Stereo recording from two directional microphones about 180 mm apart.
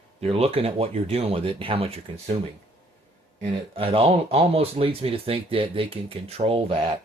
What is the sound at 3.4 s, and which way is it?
Speech, 30° right (ahead or behind).